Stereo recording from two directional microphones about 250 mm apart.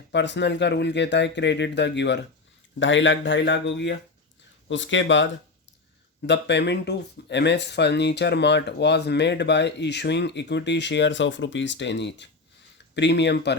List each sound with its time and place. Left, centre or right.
0.1 s speech: left